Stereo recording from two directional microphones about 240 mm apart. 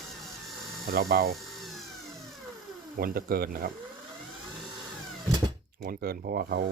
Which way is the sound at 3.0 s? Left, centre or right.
Right.